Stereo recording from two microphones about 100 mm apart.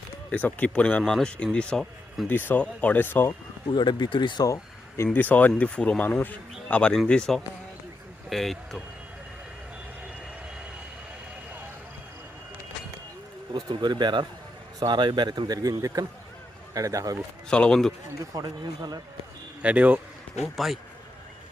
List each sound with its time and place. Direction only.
0.3 s speech: 15° left (ahead or behind)
2.3 s speech: 20° left (ahead or behind)
3.7 s speech: 50° left (ahead or behind)
4.4 s a sound: 35° left (ahead or behind)
5.1 s speech: 15° left (ahead or behind)
13.5 s speech: 50° right (ahead or behind)
16.7 s speech: 35° right (ahead or behind)
17.5 s speech: 5° left (ahead or behind)
18.3 s speech: 40° right (ahead or behind)
19.6 s speech: 15° right (ahead or behind)
20.4 s speech: centre (ahead or behind)